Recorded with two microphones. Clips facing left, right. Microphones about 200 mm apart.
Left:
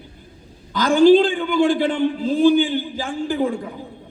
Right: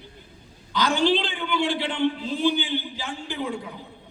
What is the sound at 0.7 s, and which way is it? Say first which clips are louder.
A man's voice: left 10 dB; 50° left (ahead or behind).